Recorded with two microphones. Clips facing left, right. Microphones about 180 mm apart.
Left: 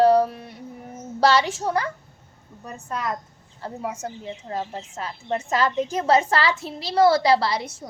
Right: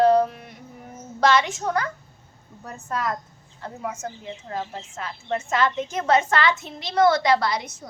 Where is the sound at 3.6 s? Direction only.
35° left (ahead or behind).